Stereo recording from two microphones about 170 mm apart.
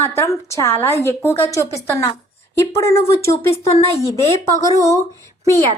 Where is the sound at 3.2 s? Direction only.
15° left (ahead or behind).